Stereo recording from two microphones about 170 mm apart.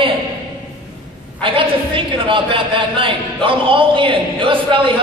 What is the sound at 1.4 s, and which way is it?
A man's voice, 30° right (ahead or behind).